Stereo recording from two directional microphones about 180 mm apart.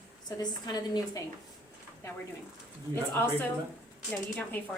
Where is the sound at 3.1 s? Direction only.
10° left (ahead or behind).